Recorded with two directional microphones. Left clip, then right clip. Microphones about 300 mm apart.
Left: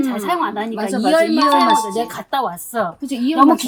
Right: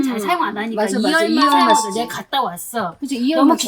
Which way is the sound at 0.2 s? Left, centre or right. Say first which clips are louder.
Even; centre.